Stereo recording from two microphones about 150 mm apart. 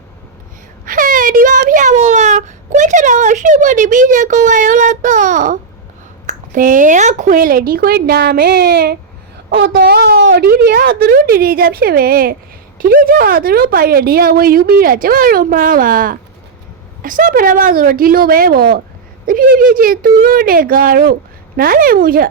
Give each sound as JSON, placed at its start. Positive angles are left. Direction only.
{"t": 0.9, "sound": "a child's voice", "side_deg": -65}
{"t": 19.2, "sound": "speech", "side_deg": -70}